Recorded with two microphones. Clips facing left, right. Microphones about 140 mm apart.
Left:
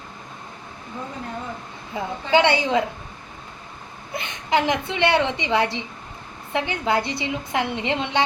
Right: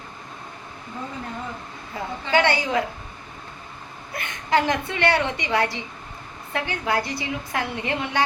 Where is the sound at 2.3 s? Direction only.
20° left (ahead or behind).